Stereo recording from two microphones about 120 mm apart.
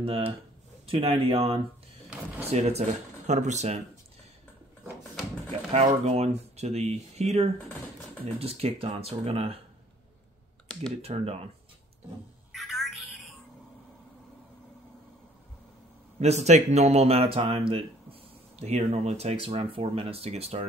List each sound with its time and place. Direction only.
0.0 s speech: 55° right (ahead or behind)
2.4 s speech: 60° right (ahead or behind)
3.3 s speech: 75° right (ahead or behind)
5.7 s speech: 60° right (ahead or behind)
11.0 s speech: 55° right (ahead or behind)
12.5 s telephone: centre (ahead or behind)
16.2 s speech: 70° right (ahead or behind)